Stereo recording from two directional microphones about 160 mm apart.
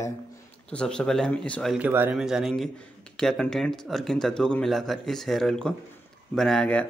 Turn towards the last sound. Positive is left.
turn(degrees=5)  # may be behind; listen again after turning